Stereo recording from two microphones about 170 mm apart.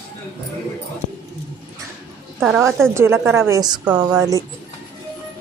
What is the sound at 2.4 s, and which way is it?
Speech, 5° right (ahead or behind).